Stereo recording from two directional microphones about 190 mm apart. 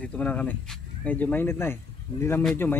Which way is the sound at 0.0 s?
5° left (ahead or behind).